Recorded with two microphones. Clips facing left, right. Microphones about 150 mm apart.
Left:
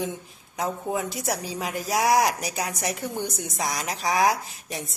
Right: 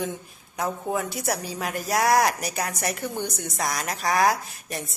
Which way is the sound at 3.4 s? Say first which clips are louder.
Right 1 dB; centre (ahead or behind).